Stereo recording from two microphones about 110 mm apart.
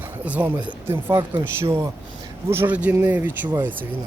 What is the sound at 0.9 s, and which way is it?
Speech, 30° right (ahead or behind).